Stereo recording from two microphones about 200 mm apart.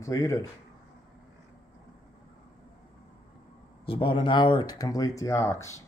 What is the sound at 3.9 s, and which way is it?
Speech, 25° left (ahead or behind).